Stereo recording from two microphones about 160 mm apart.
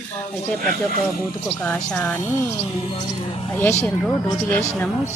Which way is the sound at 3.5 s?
15° left (ahead or behind).